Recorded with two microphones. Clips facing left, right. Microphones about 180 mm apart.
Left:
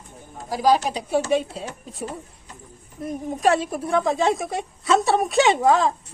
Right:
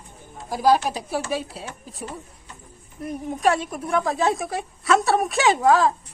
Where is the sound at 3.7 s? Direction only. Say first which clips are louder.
Left 2 dB; 25° left (ahead or behind).